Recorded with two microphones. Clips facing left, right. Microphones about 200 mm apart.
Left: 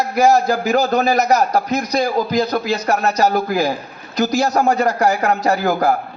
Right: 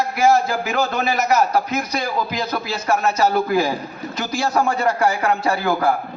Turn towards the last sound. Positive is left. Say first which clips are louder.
# left 3 dB
turn(degrees=40)  # may be behind; listen again after turning